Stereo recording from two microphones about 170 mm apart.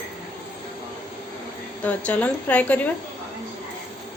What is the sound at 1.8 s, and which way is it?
A woman's voice, 10° left (ahead or behind).